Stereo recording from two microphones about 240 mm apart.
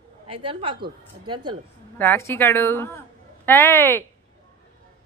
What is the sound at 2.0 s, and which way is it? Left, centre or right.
Speech, centre.